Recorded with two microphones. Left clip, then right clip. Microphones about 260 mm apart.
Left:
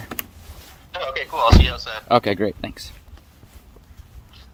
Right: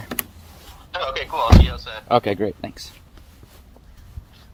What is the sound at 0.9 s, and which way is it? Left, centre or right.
Telephone, centre.